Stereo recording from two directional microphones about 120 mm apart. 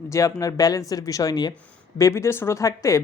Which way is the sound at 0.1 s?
25° left (ahead or behind).